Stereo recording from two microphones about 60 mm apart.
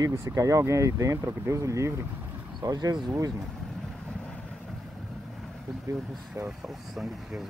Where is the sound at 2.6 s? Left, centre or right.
Right.